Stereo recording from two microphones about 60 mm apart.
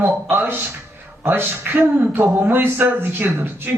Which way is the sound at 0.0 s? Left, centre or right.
Right.